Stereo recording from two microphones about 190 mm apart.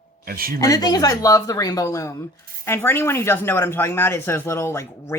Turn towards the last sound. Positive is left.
turn(degrees=15)  # may be behind; listen again after turning